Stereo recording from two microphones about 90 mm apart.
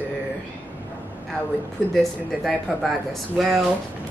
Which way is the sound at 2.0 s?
Centre (ahead or behind).